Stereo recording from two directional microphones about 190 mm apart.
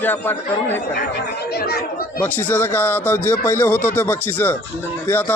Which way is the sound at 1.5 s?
55° left (ahead or behind).